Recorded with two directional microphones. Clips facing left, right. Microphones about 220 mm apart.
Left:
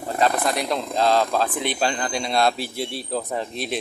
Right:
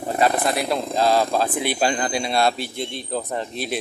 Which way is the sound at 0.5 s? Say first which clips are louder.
Right 2 dB; 5° right (ahead or behind).